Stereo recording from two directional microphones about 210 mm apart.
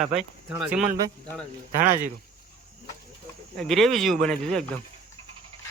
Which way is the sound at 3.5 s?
Centre (ahead or behind).